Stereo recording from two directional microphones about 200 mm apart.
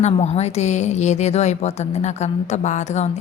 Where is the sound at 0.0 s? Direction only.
35° left (ahead or behind).